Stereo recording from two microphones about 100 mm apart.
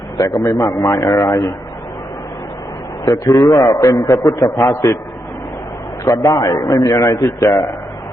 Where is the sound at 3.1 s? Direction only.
40° left (ahead or behind).